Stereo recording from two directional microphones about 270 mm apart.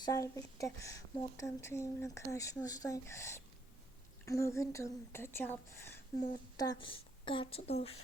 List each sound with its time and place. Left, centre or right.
0.0 s a woman's voice: centre